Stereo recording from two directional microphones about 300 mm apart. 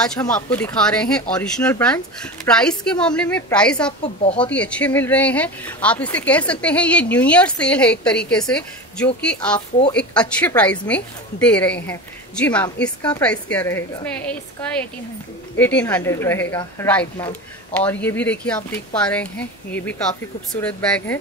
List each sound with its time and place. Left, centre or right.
0.0 s speech: centre
4.0 s speech: centre
4.4 s speech: centre